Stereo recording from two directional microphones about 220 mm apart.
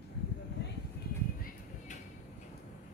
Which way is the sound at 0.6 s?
50° left (ahead or behind).